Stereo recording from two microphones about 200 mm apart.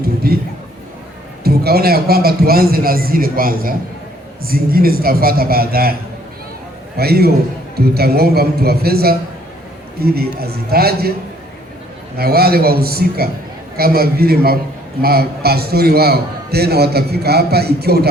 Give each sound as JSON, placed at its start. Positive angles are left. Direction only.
{"t": 0.0, "sound": "a sound", "side_deg": -50}
{"t": 1.5, "sound": "a man's voice", "side_deg": -50}
{"t": 12.1, "sound": "a man's voice", "side_deg": -50}